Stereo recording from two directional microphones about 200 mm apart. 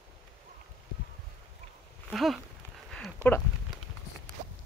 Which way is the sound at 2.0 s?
Centre (ahead or behind).